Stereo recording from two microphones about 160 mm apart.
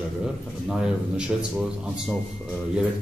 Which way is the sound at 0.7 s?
5° right (ahead or behind).